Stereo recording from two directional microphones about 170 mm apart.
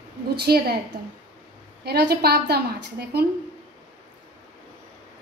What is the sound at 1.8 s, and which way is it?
Speech, 75° right (ahead or behind).